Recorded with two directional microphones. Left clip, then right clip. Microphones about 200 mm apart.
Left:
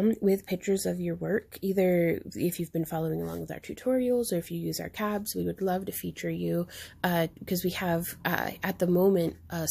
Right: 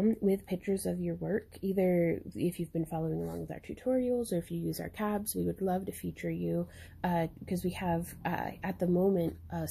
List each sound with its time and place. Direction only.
0.0 s speech: 15° left (ahead or behind)